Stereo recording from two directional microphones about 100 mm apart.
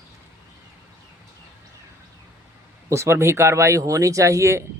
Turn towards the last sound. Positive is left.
turn(degrees=-30)  # may be behind; listen again after turning